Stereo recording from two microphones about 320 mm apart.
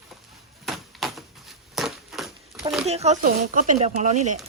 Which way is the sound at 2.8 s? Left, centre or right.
Centre.